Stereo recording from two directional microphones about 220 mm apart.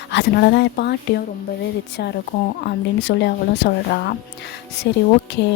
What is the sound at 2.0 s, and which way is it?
A woman's voice, 50° left (ahead or behind).